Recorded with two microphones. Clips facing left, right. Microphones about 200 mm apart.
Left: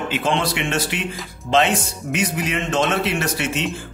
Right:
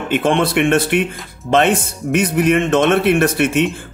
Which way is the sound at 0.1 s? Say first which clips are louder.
Right 8 dB; 55° right (ahead or behind).